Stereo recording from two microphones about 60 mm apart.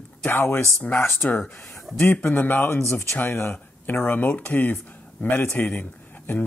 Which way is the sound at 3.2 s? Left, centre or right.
Left.